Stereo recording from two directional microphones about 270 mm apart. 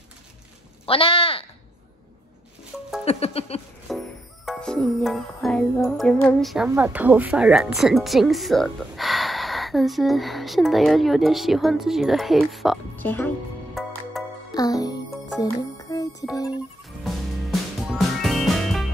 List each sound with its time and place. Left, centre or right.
0.8 s speech: left
3.1 s speech: left
3.9 s music: centre
14.5 s music: centre
17.0 s music: centre